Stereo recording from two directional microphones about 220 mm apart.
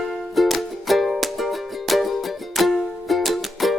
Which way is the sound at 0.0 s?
Centre (ahead or behind).